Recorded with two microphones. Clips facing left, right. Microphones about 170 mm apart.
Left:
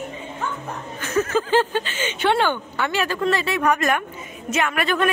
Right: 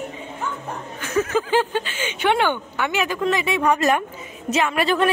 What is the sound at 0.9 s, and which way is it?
A woman's voice, 10° right (ahead or behind).